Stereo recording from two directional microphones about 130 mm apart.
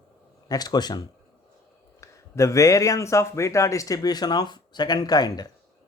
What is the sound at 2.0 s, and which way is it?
Speech, 25° left (ahead or behind).